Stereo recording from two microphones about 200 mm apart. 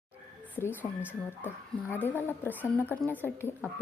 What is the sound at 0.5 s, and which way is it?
Speech, 10° left (ahead or behind).